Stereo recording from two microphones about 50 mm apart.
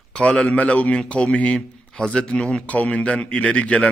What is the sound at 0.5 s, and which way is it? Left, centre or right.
A man's voice, left.